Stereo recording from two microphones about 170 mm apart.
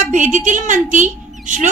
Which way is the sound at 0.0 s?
50° right (ahead or behind).